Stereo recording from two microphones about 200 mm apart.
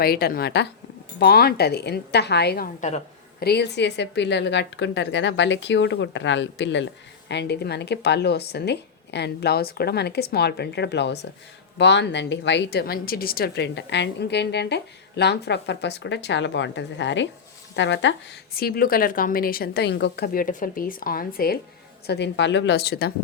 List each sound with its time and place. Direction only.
0.0 s a woman's voice: 50° left (ahead or behind)